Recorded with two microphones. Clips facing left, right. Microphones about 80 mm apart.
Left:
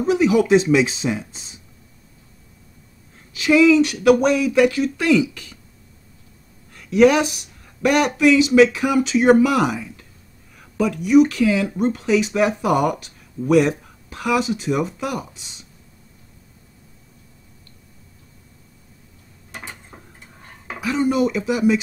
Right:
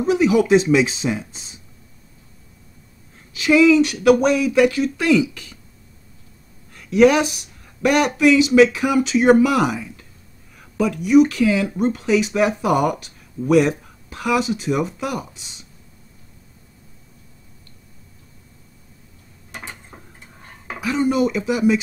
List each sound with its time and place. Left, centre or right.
0.0 s speech: centre
3.3 s speech: centre
6.7 s speech: centre
19.5 s a sound: right
20.8 s speech: centre